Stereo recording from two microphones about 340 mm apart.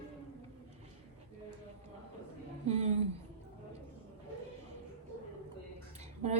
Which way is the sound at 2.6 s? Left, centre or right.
Centre.